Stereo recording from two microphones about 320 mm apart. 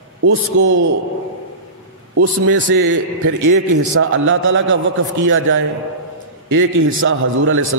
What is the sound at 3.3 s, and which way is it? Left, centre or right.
Speech, right.